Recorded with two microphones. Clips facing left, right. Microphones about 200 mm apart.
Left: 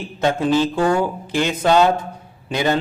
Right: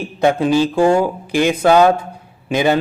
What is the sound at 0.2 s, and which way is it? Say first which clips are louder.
A man's voice: right 3 dB; 15° right (ahead or behind).